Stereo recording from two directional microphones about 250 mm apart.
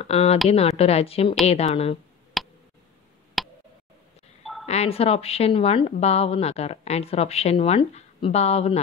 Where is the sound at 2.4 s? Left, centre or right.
Centre.